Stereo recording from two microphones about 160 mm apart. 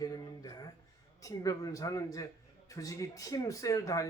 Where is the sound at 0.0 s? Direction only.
25° left (ahead or behind).